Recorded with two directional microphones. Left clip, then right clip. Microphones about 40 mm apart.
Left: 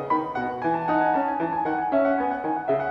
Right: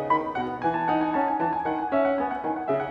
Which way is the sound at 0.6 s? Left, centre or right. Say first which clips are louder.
Even; right.